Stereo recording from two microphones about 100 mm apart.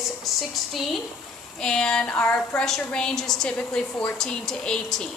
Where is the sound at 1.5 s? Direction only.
5° left (ahead or behind).